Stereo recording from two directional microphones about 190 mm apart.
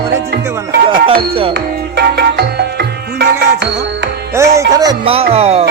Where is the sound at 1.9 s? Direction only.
55° right (ahead or behind).